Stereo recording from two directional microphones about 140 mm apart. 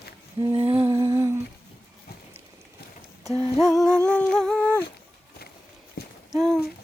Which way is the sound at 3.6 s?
Centre (ahead or behind).